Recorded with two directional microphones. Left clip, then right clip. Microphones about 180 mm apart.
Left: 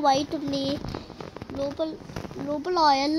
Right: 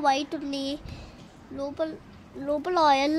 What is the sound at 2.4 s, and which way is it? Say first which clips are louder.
Speech: even; 15° right (ahead or behind).